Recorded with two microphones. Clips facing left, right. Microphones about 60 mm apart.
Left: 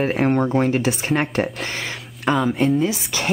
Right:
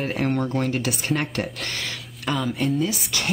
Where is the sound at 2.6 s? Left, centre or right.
Left.